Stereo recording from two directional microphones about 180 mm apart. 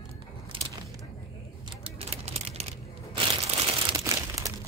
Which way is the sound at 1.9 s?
35° right (ahead or behind).